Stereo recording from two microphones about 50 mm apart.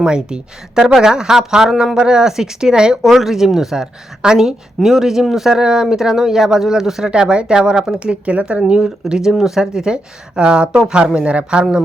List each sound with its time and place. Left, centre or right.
0.0 s speech: centre
7.1 s speech: centre
7.9 s speech: right
8.8 s speech: centre